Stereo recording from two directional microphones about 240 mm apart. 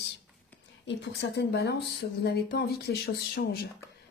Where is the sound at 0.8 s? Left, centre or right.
Left.